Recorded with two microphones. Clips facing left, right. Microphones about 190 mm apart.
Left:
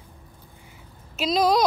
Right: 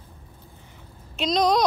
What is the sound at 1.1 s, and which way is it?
Speech, 5° left (ahead or behind).